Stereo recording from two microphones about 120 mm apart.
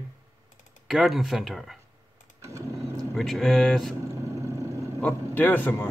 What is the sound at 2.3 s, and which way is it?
Vehicle, 25° right (ahead or behind).